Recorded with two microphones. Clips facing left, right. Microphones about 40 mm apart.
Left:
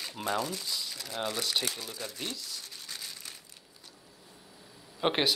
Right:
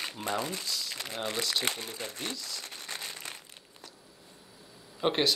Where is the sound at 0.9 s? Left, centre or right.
Right.